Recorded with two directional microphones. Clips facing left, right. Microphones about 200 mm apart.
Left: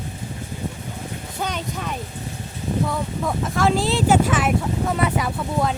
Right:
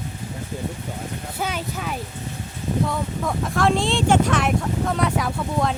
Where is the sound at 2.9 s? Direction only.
Centre (ahead or behind).